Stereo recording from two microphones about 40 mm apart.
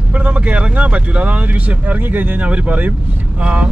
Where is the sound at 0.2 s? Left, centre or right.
Right.